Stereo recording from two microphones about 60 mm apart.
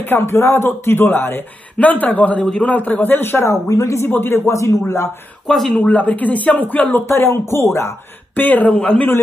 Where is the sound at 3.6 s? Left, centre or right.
Left.